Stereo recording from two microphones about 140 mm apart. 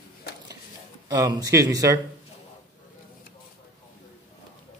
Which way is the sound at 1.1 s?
25° right (ahead or behind).